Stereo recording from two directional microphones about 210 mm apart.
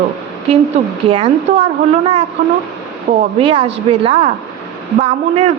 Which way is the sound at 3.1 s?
30° right (ahead or behind).